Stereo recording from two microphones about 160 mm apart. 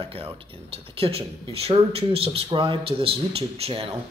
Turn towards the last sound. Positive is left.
turn(degrees=-35)  # may be behind; listen again after turning